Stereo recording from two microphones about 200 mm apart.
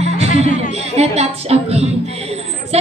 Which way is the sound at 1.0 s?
30° right (ahead or behind).